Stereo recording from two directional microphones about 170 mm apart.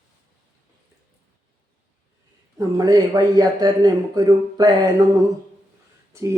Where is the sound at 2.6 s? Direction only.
20° right (ahead or behind).